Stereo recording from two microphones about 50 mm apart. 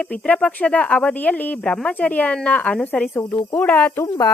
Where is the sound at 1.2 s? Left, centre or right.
Left.